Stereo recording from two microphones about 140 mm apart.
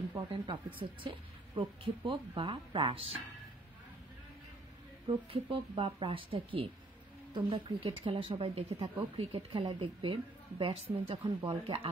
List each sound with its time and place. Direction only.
0.3 s speech: 35° right (ahead or behind)
5.0 s speech: 40° right (ahead or behind)